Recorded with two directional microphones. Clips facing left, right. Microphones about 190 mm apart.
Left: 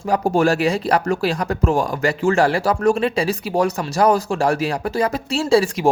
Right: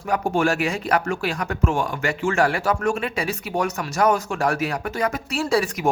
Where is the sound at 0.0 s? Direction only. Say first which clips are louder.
Left 4 dB; 35° left (ahead or behind).